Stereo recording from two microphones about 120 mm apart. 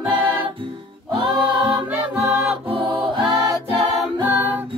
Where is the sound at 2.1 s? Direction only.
50° right (ahead or behind).